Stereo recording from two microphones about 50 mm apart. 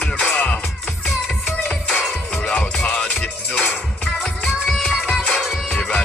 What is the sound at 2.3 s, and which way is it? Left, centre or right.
Music, centre.